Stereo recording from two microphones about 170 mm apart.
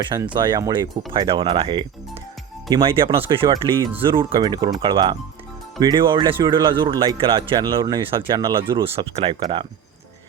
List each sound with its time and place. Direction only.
0.0 s speech: 25° right (ahead or behind)